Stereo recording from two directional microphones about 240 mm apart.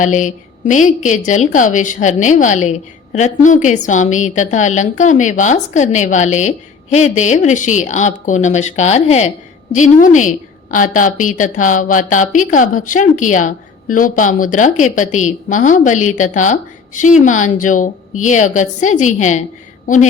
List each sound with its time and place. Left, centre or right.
0.0 s a woman's voice: left